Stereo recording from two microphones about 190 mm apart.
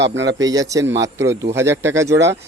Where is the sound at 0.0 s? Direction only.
70° right (ahead or behind).